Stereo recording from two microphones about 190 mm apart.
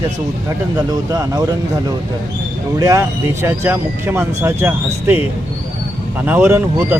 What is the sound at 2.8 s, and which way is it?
Speech, 15° right (ahead or behind).